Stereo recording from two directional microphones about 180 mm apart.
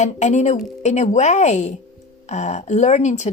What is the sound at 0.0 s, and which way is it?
A woman's voice, 40° left (ahead or behind).